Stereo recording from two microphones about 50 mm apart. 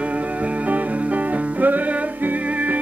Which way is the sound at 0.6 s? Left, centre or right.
Right.